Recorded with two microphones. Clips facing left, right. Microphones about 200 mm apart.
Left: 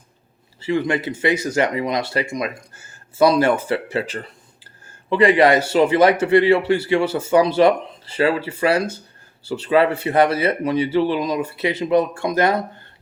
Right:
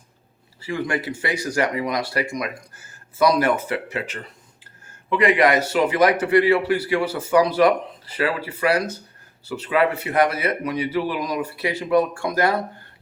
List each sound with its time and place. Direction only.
0.6 s a man's voice: 25° left (ahead or behind)